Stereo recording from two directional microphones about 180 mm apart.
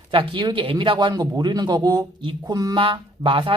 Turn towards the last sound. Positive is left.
turn(degrees=-30)  # may be behind; listen again after turning